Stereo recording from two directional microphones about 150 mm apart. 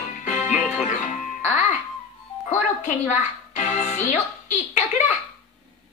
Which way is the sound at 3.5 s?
50° left (ahead or behind).